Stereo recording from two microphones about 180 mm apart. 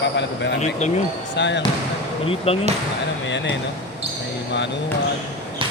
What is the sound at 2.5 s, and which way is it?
Speech, 35° left (ahead or behind).